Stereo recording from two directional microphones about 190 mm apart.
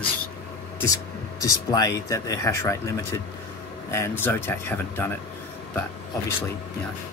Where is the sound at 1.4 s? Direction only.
20° left (ahead or behind).